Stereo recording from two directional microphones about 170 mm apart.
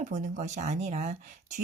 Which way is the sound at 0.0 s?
45° right (ahead or behind).